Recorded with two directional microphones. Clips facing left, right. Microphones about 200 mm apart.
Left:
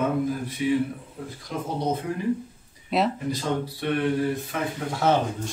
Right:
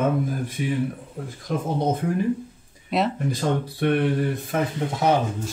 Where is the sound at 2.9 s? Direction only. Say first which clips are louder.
Even; centre (ahead or behind).